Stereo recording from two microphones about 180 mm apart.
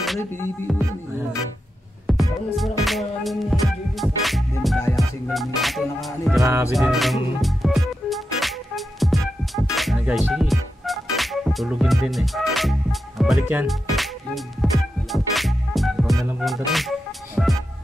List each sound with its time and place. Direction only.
2.0 s music: centre (ahead or behind)
6.4 s music: 15° right (ahead or behind)
6.7 s music: centre (ahead or behind)
13.2 s speech: 5° right (ahead or behind)
13.7 s music: centre (ahead or behind)